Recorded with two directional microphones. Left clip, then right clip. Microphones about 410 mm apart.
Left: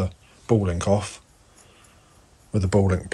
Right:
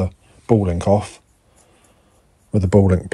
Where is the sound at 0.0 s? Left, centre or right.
Centre.